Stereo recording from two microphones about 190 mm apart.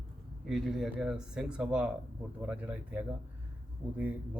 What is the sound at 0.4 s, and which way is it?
Speech, centre (ahead or behind).